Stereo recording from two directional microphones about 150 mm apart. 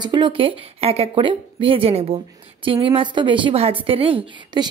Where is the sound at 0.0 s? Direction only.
30° right (ahead or behind).